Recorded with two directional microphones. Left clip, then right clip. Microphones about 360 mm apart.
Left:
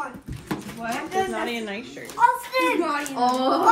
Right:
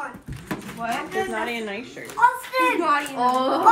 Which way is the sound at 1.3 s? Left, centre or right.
Right.